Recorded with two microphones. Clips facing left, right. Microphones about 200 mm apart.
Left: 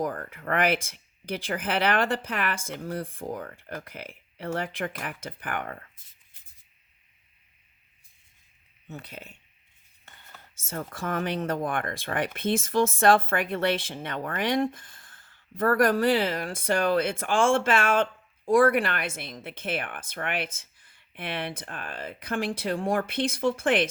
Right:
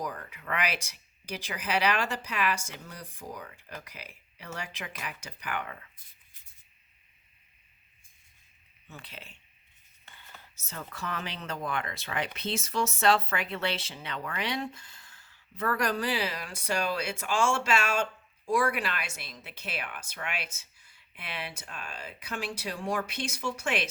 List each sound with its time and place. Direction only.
0.0 s speech: 50° left (ahead or behind)
9.0 s speech: 40° left (ahead or behind)
10.7 s speech: 45° left (ahead or behind)